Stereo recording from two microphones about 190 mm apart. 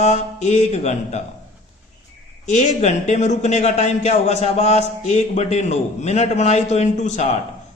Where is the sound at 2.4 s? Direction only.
40° left (ahead or behind).